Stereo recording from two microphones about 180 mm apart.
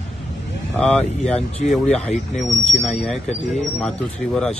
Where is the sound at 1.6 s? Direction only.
45° left (ahead or behind).